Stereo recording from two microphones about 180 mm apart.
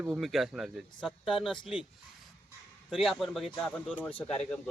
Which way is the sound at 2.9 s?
Centre (ahead or behind).